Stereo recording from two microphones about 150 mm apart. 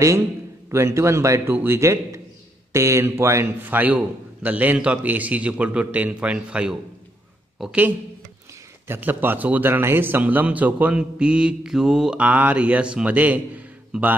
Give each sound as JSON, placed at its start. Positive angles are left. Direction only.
{"t": 0.7, "sound": "a man's voice", "side_deg": -20}